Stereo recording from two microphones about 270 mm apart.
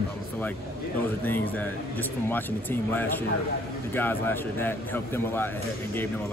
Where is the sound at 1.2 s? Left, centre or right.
Centre.